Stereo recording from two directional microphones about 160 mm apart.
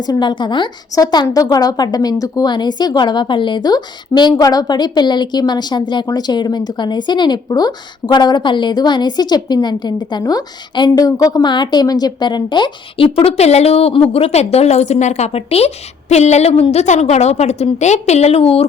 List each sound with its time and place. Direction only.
0.0 s a woman's voice: 25° left (ahead or behind)